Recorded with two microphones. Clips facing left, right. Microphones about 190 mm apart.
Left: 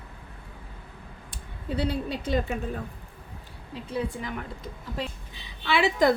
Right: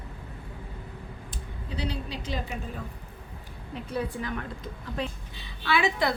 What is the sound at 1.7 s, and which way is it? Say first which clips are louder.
Speech: left 6 dB; 55° left (ahead or behind).